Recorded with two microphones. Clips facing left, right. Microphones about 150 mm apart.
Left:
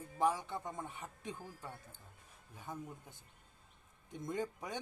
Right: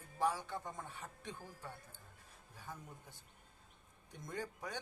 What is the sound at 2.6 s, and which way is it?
Speech, 20° left (ahead or behind).